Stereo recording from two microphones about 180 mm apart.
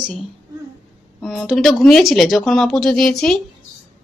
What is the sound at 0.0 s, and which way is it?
A woman's voice, centre (ahead or behind).